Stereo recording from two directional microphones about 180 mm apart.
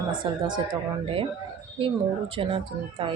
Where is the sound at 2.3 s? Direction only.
30° right (ahead or behind).